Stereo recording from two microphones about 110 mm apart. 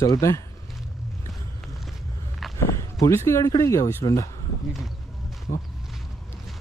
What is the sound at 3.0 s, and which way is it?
A man's voice, 25° left (ahead or behind).